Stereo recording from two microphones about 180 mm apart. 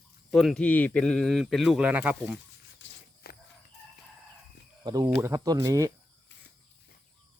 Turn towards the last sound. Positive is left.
turn(degrees=-20)  # may be behind; listen again after turning